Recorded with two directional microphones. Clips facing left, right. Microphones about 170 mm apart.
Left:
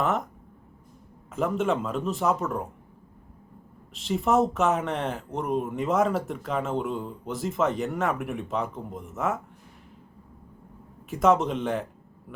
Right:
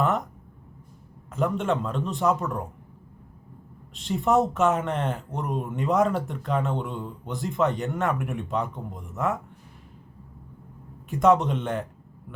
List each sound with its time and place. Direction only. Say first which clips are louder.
0.0 s a sound: right 1 dB; centre (ahead or behind)
1.3 s speech: even; centre (ahead or behind)
3.9 s speech: right 1 dB; centre (ahead or behind)
11.1 s speech: right 1 dB; centre (ahead or behind)